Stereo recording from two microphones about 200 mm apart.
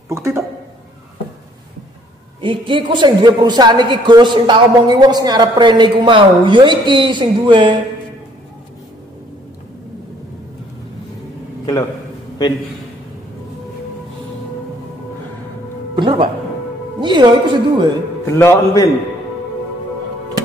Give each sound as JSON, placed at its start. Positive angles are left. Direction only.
{"t": 0.1, "sound": "speech", "side_deg": -15}
{"t": 2.4, "sound": "a woman's voice", "side_deg": -25}
{"t": 16.0, "sound": "a woman's voice", "side_deg": -25}
{"t": 18.2, "sound": "a man's voice", "side_deg": 10}